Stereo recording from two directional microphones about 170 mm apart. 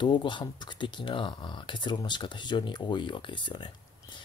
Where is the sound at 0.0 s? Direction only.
25° left (ahead or behind).